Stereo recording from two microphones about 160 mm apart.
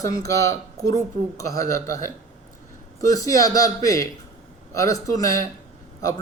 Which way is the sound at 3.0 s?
20° left (ahead or behind).